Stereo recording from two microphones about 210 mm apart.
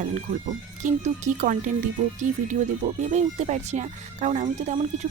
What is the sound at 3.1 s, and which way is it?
Speech, 35° right (ahead or behind).